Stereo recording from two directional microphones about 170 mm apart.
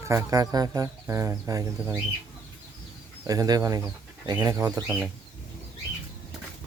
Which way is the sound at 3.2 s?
20° right (ahead or behind).